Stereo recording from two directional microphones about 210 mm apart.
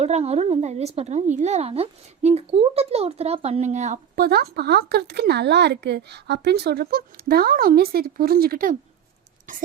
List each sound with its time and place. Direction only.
0.0 s a woman's voice: 30° right (ahead or behind)